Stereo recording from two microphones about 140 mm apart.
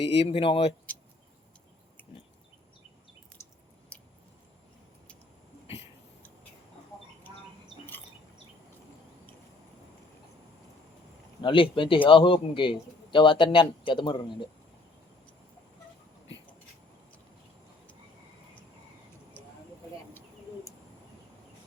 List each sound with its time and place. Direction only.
0.0 s speech: 45° left (ahead or behind)
3.4 s squish: 20° left (ahead or behind)
11.4 s a man's voice: 40° left (ahead or behind)